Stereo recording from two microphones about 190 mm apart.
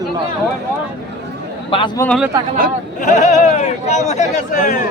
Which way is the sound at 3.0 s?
40° left (ahead or behind).